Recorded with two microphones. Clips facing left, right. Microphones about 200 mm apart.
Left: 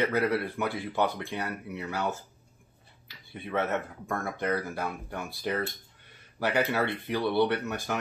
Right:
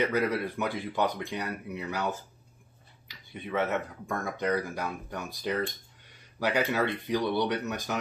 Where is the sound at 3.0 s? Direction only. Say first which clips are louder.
Even; 15° right (ahead or behind).